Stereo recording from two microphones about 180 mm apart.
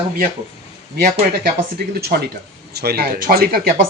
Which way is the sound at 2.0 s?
60° right (ahead or behind).